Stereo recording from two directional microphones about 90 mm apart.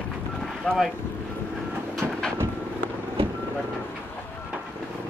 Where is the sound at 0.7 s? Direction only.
15° left (ahead or behind).